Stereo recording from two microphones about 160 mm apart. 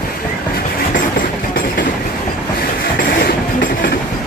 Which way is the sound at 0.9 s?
60° left (ahead or behind).